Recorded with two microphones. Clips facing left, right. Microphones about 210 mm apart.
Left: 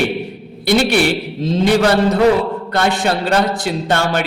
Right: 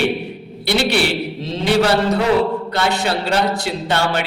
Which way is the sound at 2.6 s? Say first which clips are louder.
Left 3 dB; 50° left (ahead or behind).